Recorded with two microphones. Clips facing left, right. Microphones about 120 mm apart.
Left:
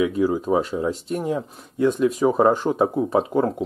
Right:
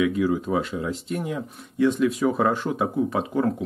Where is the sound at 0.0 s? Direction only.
35° left (ahead or behind).